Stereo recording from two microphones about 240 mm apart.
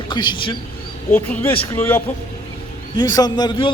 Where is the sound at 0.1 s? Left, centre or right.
Centre.